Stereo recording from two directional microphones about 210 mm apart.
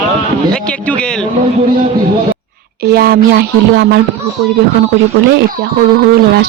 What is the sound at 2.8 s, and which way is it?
A woman's voice, 50° right (ahead or behind).